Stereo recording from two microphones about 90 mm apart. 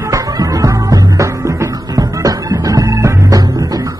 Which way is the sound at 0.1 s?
40° right (ahead or behind).